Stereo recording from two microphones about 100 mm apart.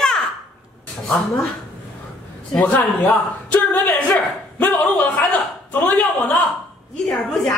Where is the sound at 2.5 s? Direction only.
15° left (ahead or behind).